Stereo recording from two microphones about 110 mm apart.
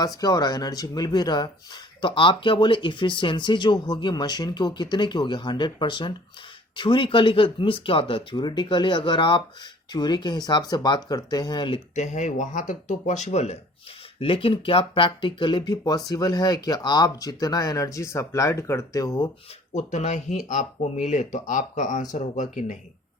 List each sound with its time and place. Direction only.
0.0 s speech: 35° left (ahead or behind)
11.9 s speech: 90° left
14.2 s speech: 55° left (ahead or behind); by 19.3 s 35° left (ahead or behind)
19.7 s speech: 90° left